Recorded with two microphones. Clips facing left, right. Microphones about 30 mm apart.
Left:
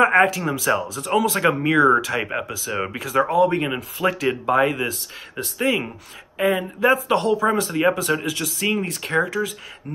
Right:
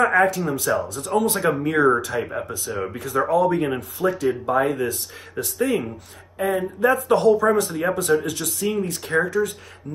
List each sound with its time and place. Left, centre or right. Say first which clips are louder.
0.4 s speech: left 1 dB; left
0.7 s speech: left 1 dB; left
3.0 s speech: left 1 dB; left
4.0 s speech: even; left
4.3 s speech: left 1 dB; left